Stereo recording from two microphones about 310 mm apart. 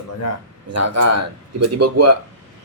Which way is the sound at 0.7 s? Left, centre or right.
Right.